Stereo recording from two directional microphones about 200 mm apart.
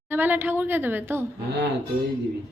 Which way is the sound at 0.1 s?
10° right (ahead or behind).